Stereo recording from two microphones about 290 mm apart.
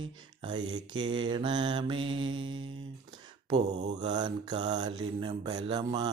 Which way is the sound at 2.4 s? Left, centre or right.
Right.